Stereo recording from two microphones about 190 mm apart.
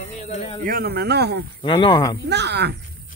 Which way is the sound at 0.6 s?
50° right (ahead or behind).